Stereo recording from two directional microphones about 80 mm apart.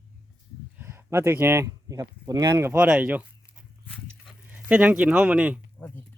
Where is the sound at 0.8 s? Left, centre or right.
Right.